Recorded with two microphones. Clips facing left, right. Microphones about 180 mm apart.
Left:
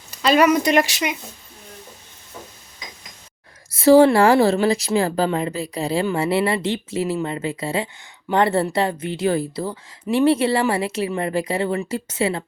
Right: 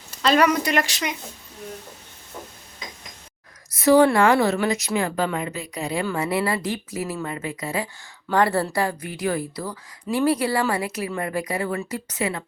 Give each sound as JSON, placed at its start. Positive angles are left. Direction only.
{"t": 0.2, "sound": "speech", "side_deg": 10}
{"t": 0.4, "sound": "speech", "side_deg": 20}
{"t": 3.7, "sound": "a woman's voice", "side_deg": 30}